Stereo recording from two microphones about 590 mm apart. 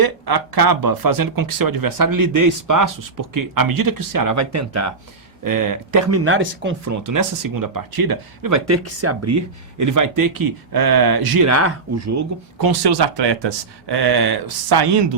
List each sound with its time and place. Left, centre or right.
0.0 s speech: right; by 6.9 s centre
7.0 s speech: right
12.5 s speech: right